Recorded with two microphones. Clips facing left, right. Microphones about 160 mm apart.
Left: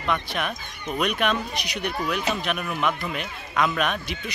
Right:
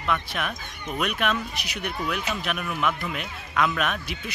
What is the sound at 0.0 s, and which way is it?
A man's voice, centre (ahead or behind).